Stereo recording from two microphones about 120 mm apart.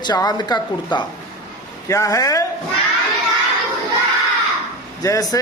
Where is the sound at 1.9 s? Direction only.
25° left (ahead or behind).